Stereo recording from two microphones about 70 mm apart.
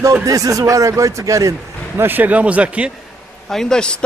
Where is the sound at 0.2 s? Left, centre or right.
Right.